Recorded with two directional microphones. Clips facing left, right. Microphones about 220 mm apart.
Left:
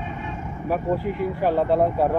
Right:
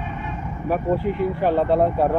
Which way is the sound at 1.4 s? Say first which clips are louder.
Even; 10° left (ahead or behind).